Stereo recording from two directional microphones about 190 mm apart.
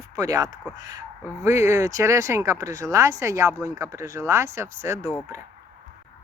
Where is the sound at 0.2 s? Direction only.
20° right (ahead or behind).